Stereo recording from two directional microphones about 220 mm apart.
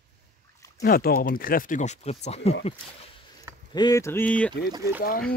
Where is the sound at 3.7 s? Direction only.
15° left (ahead or behind).